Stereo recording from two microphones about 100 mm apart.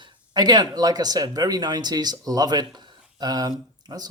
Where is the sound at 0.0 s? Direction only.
40° right (ahead or behind).